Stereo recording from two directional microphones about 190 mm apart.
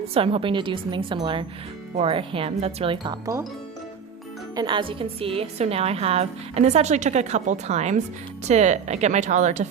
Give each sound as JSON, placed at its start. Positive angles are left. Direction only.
{"t": 0.1, "sound": "speech", "side_deg": -30}
{"t": 4.5, "sound": "a woman's voice", "side_deg": -25}